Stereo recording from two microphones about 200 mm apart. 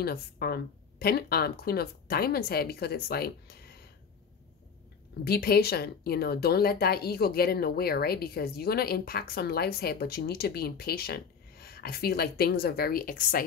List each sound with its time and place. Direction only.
0.0 s speech: 50° left (ahead or behind)
5.2 s speech: 50° left (ahead or behind)